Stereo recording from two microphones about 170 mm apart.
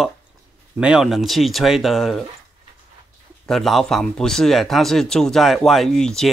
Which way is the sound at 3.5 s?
Centre (ahead or behind).